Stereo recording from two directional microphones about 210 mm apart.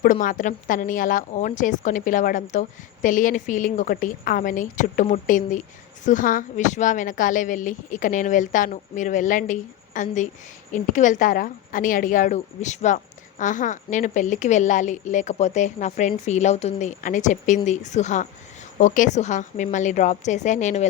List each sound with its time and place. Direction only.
0.0 s a woman's voice: 40° left (ahead or behind)